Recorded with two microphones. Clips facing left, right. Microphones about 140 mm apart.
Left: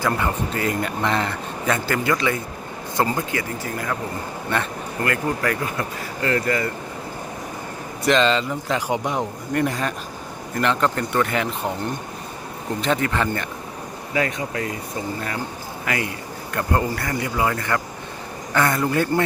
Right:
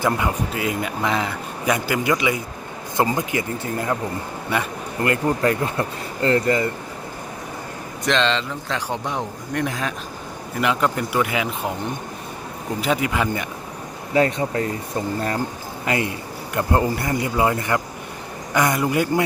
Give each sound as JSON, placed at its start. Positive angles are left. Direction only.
{"t": 0.0, "sound": "a man's voice", "side_deg": -10}
{"t": 1.6, "sound": "a man's voice", "side_deg": -15}
{"t": 5.0, "sound": "speech", "side_deg": -25}
{"t": 8.0, "sound": "a man's voice", "side_deg": 5}
{"t": 12.8, "sound": "a man's voice", "side_deg": -10}
{"t": 14.1, "sound": "speech", "side_deg": -30}
{"t": 15.9, "sound": "a man's voice", "side_deg": -25}